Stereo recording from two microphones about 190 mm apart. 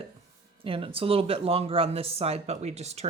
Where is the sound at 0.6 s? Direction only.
30° right (ahead or behind).